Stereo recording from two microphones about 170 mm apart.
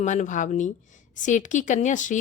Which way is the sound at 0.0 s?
45° left (ahead or behind).